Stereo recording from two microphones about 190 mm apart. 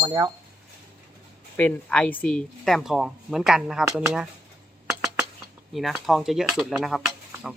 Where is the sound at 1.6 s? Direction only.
5° left (ahead or behind).